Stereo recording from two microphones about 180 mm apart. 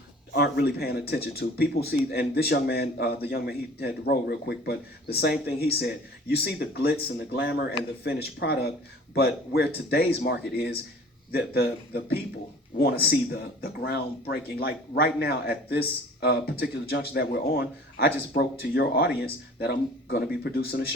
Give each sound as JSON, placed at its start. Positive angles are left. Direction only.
{"t": 0.3, "sound": "speech", "side_deg": 60}